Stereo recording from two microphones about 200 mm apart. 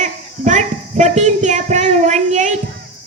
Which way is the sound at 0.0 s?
35° right (ahead or behind).